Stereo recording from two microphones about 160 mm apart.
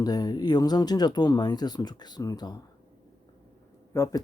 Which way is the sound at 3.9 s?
15° left (ahead or behind).